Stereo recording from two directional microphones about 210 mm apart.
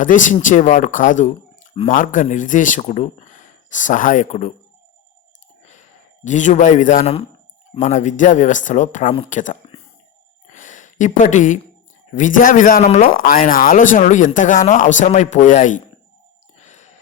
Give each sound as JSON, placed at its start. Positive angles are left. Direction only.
{"t": 0.0, "sound": "speech", "side_deg": 40}
{"t": 6.2, "sound": "speech", "side_deg": 35}
{"t": 10.5, "sound": "a sound", "side_deg": 35}
{"t": 11.2, "sound": "speech", "side_deg": 35}
{"t": 16.6, "sound": "sigh", "side_deg": 35}